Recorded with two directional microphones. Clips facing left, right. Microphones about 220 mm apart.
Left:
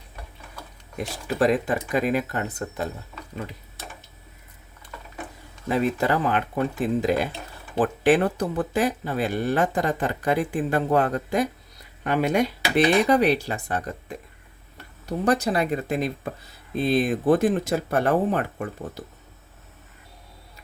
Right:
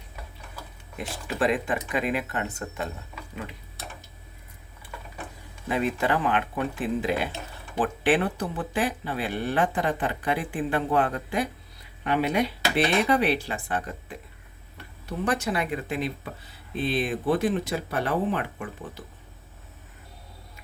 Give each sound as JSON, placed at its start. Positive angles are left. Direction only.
{"t": 0.9, "sound": "speech", "side_deg": 40}
{"t": 5.6, "sound": "speech", "side_deg": 40}